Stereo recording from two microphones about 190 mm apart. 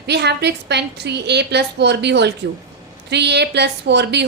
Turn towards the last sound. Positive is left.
turn(degrees=-65)  # may be behind; listen again after turning